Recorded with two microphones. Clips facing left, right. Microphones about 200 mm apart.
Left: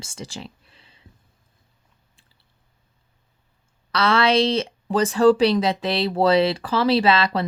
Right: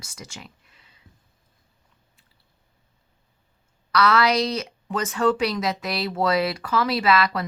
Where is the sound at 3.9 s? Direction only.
30° left (ahead or behind).